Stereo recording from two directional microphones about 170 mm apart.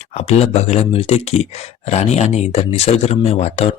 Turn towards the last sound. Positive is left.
turn(degrees=40)  # may be behind; listen again after turning